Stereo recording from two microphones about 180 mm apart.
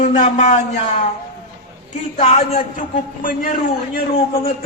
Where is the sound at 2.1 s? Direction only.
35° left (ahead or behind).